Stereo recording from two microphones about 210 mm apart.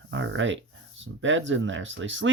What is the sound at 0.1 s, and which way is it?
Speech, 65° right (ahead or behind).